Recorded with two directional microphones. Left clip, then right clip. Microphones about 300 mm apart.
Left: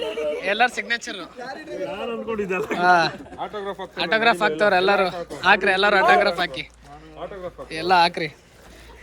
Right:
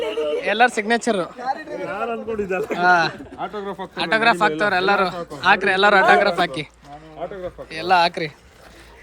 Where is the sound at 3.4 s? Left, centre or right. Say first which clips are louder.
Right 2 dB; right.